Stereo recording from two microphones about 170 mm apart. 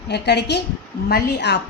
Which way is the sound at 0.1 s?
80° left.